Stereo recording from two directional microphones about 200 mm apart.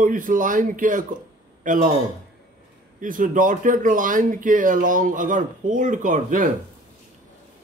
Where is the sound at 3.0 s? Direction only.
40° right (ahead or behind).